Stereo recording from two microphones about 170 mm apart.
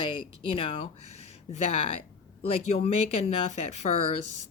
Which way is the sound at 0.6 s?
30° left (ahead or behind).